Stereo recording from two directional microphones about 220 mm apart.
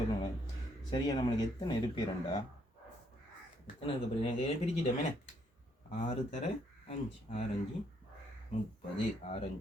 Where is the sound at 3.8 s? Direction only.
25° left (ahead or behind).